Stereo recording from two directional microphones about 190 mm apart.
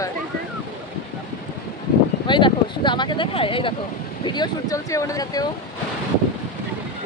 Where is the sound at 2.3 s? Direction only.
25° left (ahead or behind).